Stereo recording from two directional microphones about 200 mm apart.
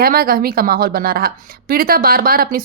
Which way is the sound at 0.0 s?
45° right (ahead or behind).